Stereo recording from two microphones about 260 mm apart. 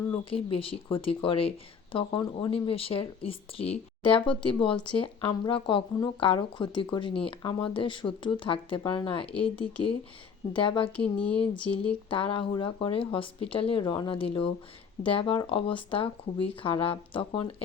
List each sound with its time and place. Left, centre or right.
0.3 s speech: left
10.9 s speech: centre
12.0 s speech: centre